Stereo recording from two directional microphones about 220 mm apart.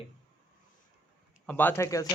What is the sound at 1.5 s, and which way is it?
Speech, 10° left (ahead or behind).